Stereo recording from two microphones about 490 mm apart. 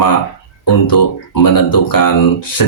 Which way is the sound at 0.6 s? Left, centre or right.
Left.